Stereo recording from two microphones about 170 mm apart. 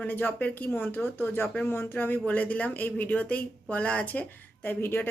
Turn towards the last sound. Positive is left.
turn(degrees=10)  # may be behind; listen again after turning